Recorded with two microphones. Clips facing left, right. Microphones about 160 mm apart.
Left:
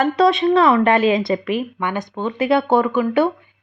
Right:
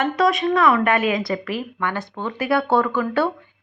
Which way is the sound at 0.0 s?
30° left (ahead or behind).